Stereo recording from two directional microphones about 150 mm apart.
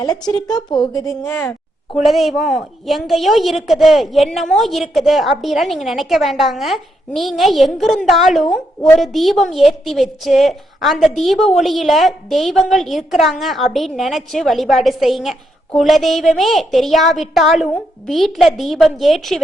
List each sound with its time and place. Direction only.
0.7 s a woman's voice: 25° left (ahead or behind)
2.0 s a woman's voice: centre (ahead or behind)